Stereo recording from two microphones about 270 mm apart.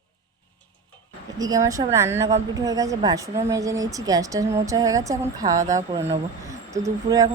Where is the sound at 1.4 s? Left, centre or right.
Centre.